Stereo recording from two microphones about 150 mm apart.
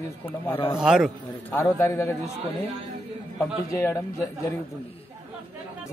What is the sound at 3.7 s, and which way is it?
Speech, 20° left (ahead or behind).